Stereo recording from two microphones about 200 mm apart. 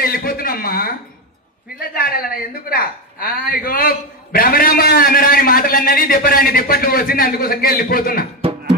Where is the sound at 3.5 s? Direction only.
45° left (ahead or behind).